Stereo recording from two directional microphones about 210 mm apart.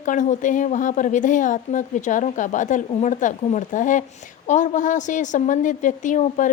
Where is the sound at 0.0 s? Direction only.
35° left (ahead or behind).